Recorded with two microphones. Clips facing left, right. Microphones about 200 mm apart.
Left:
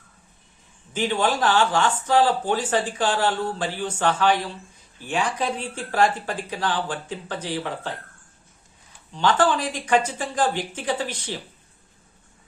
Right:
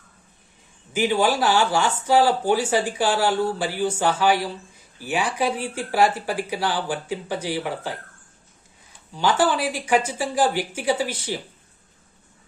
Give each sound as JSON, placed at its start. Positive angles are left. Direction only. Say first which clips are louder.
{"t": 0.9, "sound": "speech", "louder": "right 3 dB", "side_deg": -10}
{"t": 9.1, "sound": "speech", "louder": "even", "side_deg": -10}